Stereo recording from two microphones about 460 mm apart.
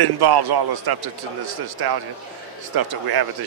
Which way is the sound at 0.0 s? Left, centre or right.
Right.